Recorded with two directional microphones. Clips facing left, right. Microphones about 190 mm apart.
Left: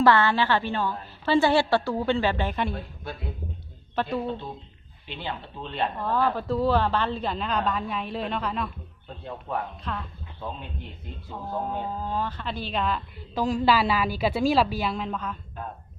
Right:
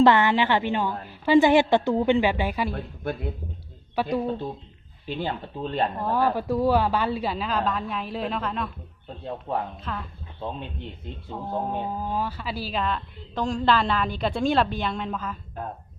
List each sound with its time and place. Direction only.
0.0 s a woman's voice: 20° right (ahead or behind)
3.9 s a woman's voice: 15° right (ahead or behind)
5.0 s speech: 45° right (ahead or behind)
6.0 s a woman's voice: 15° right (ahead or behind)
9.5 s speech: 25° right (ahead or behind)
9.8 s speech: centre (ahead or behind)
11.3 s speech: 20° right (ahead or behind); by 15.4 s centre (ahead or behind)